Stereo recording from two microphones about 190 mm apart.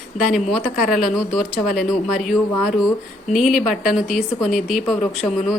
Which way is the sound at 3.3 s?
Centre (ahead or behind).